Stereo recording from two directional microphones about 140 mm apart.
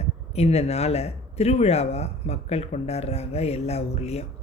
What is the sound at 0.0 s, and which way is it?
A man's voice, 50° left (ahead or behind).